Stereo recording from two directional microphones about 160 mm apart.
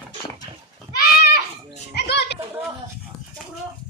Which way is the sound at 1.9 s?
90° left.